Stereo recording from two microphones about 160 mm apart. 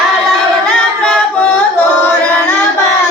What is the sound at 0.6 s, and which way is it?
Singing, 5° left (ahead or behind).